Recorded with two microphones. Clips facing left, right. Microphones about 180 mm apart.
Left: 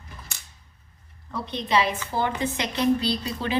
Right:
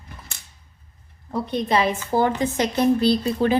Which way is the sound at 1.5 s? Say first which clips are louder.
Right 3 dB; 50° right (ahead or behind).